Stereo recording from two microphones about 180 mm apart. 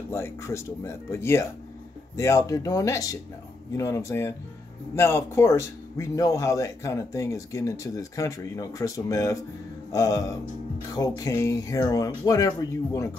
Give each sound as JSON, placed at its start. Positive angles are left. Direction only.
{"t": 0.1, "sound": "speech", "side_deg": 15}